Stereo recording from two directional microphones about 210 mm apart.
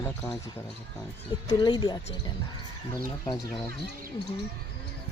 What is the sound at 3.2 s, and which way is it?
Speech, 15° left (ahead or behind).